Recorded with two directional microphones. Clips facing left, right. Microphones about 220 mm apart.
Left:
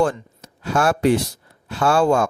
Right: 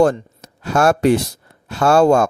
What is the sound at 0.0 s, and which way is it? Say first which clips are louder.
Speech: right 5 dB; 40° right (ahead or behind).